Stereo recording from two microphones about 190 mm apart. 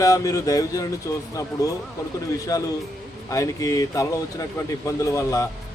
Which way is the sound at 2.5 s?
20° left (ahead or behind).